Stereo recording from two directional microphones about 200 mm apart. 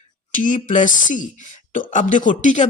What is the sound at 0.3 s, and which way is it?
Speech, 40° left (ahead or behind).